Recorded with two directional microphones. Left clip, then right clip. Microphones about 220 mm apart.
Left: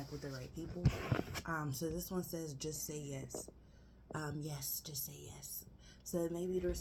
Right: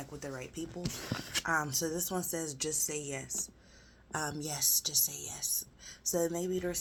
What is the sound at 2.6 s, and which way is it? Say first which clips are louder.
Speech: right 9 dB; 5° right (ahead or behind).